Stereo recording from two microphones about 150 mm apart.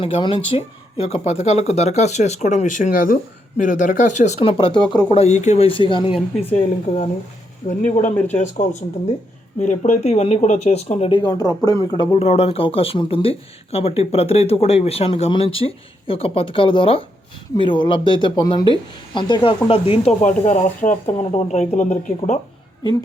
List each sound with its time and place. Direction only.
0.0 s speech: 35° left (ahead or behind)
4.4 s speech: 35° left (ahead or behind)
6.1 s a woman's voice: centre (ahead or behind)
6.6 s speech: 45° left (ahead or behind)
7.7 s speech: 55° left (ahead or behind)
8.1 s speech: 10° left (ahead or behind)
8.4 s speech: 55° left (ahead or behind)
11.1 s speech: 30° left (ahead or behind)
20.2 s speech: 50° left (ahead or behind)